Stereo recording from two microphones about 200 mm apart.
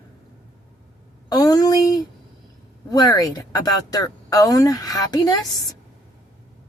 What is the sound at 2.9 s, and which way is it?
Speech, 20° left (ahead or behind).